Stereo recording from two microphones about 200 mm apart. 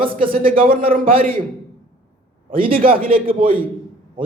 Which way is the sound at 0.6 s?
45° right (ahead or behind).